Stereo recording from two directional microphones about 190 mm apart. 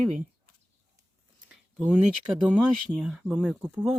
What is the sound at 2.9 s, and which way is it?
Speech, centre (ahead or behind).